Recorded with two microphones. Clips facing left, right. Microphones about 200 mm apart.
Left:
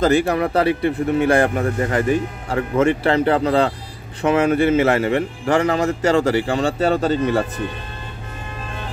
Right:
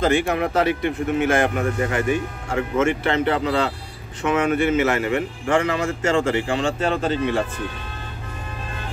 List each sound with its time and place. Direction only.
0.0 s speech: 35° left (ahead or behind)